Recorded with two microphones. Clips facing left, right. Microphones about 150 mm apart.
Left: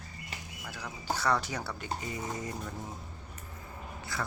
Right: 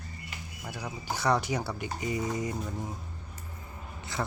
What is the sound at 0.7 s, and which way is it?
Speech, 15° right (ahead or behind).